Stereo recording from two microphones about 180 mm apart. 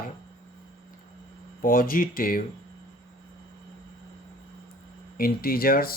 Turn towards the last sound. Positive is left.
turn(degrees=55)  # may be behind; listen again after turning